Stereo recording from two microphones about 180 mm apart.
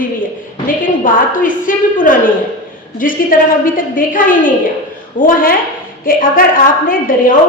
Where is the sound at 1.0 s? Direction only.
50° left (ahead or behind).